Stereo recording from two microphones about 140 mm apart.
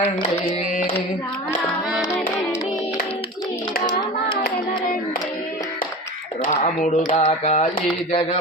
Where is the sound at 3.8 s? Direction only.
30° left (ahead or behind).